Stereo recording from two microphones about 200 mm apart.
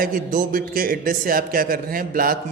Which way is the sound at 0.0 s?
45° right (ahead or behind).